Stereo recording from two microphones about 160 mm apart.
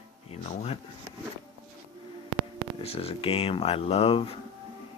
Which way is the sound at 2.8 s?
40° left (ahead or behind).